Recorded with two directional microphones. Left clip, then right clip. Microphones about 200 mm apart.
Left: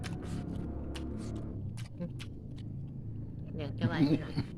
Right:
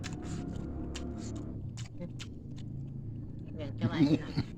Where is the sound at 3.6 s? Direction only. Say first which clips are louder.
Left 1 dB; 50° left (ahead or behind).